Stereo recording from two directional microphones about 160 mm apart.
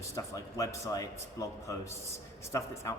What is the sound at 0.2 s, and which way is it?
A man's voice, 20° left (ahead or behind).